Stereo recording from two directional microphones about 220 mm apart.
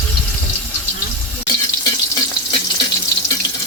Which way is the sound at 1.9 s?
20° left (ahead or behind).